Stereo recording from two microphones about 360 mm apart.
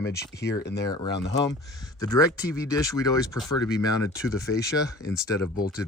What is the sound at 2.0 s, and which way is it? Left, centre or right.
Speech, centre.